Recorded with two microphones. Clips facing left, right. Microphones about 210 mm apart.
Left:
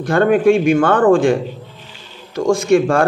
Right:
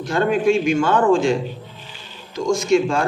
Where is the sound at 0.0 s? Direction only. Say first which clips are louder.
Left 5 dB; 55° left (ahead or behind).